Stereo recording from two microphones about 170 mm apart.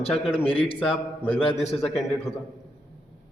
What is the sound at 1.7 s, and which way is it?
Speech, centre (ahead or behind).